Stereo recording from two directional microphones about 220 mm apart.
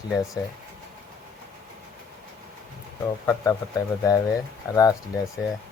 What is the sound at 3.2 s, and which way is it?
Speech, 15° left (ahead or behind).